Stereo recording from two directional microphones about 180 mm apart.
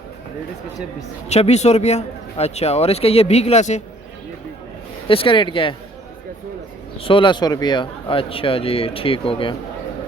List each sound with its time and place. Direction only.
1.3 s a man's voice: 35° left (ahead or behind)
5.0 s speech: 30° left (ahead or behind)
7.0 s speech: 30° left (ahead or behind)